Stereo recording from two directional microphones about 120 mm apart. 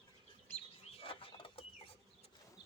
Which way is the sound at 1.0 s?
50° left (ahead or behind).